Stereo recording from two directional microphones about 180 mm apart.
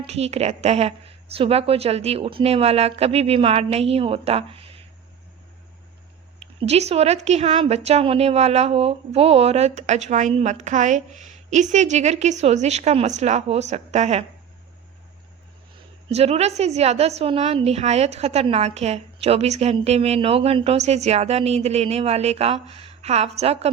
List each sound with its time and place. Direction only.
0.0 s a woman's voice: 35° right (ahead or behind)
6.4 s a woman's voice: 35° right (ahead or behind)
16.0 s a woman's voice: 35° right (ahead or behind)